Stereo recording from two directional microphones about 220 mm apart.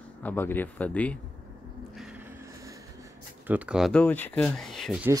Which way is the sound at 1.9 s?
5° right (ahead or behind).